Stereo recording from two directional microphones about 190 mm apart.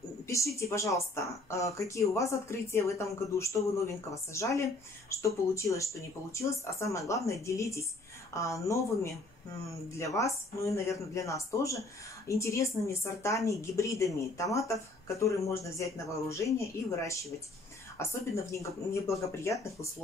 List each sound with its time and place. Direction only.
0.3 s a woman's voice: 15° left (ahead or behind)